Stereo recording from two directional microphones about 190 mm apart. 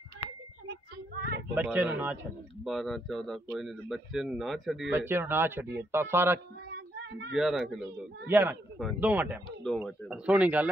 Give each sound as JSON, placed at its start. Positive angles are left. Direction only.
{"t": 0.7, "sound": "child singing", "side_deg": -60}
{"t": 1.5, "sound": "speech", "side_deg": -10}
{"t": 5.0, "sound": "speech", "side_deg": -10}
{"t": 7.0, "sound": "speech", "side_deg": -65}
{"t": 7.3, "sound": "speech", "side_deg": 0}
{"t": 9.6, "sound": "speech", "side_deg": 5}